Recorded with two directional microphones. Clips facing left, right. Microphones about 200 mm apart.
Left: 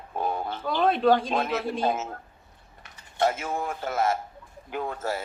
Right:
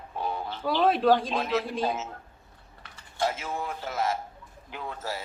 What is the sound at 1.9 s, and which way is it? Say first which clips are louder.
Speech: left 4 dB; 50° left (ahead or behind).